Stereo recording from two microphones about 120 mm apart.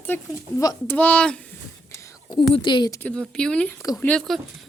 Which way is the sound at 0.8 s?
15° left (ahead or behind).